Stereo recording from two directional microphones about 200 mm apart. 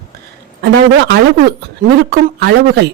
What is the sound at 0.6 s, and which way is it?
Speech, 60° right (ahead or behind).